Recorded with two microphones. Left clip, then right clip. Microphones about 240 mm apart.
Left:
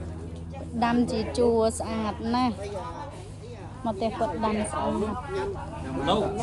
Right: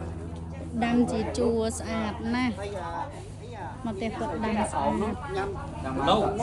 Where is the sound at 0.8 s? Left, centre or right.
Right.